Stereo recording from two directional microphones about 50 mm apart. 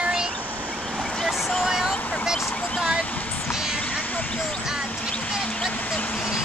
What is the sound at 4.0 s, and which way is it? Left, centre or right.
Vehicle, left.